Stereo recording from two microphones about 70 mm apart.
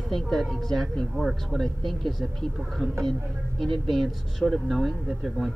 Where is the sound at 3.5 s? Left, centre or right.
Centre.